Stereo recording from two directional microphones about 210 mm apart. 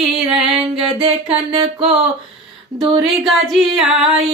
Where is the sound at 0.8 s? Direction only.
25° right (ahead or behind).